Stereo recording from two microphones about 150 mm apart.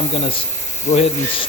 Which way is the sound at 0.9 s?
40° left (ahead or behind).